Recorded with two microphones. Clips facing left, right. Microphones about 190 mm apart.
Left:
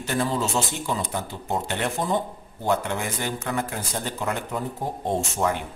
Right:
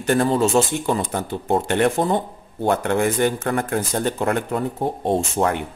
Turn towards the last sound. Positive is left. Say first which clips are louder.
# right 4 dB
turn(degrees=-65)  # may be behind; listen again after turning